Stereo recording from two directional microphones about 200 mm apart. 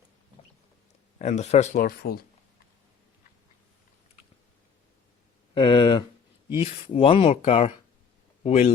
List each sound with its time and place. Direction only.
1.2 s speech: 35° left (ahead or behind)
5.5 s a sound: 25° left (ahead or behind)
6.6 s speech: 30° left (ahead or behind)